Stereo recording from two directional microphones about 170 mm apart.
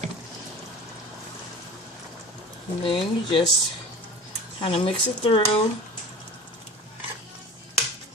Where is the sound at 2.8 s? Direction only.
30° left (ahead or behind).